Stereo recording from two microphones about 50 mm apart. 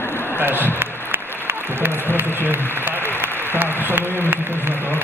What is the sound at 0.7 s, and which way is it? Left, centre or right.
Applause, right.